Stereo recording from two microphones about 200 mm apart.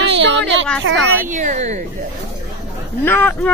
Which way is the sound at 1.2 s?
40° right (ahead or behind).